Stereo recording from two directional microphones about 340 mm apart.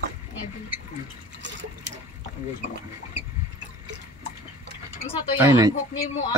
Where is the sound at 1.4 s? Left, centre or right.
Right.